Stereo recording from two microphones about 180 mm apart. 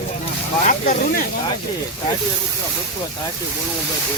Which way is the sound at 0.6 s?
45° left (ahead or behind).